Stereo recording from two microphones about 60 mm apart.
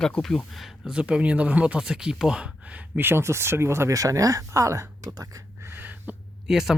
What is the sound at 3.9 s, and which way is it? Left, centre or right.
Speech, right.